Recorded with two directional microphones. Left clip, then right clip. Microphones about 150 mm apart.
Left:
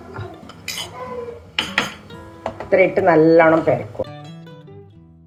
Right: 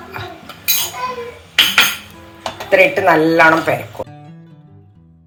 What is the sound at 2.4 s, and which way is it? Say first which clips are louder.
Music: right 4 dB; 5° left (ahead or behind).